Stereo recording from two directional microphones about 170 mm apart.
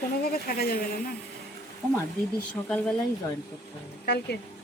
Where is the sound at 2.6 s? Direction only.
5° left (ahead or behind).